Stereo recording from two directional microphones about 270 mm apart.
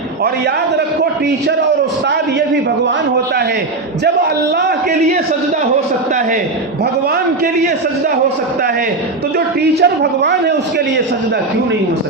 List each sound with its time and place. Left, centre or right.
9.8 s a man's voice: right